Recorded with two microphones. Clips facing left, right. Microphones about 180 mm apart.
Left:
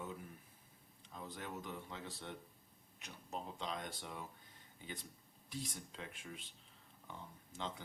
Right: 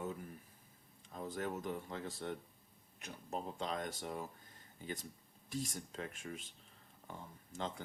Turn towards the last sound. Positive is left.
turn(degrees=-45)  # may be behind; listen again after turning